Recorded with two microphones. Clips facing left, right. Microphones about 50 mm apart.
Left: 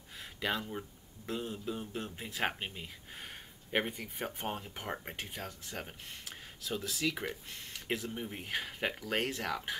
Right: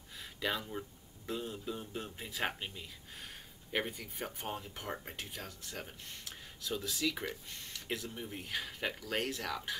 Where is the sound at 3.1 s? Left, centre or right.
Centre.